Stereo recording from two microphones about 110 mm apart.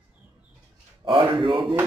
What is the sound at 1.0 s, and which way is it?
Speech, 50° right (ahead or behind).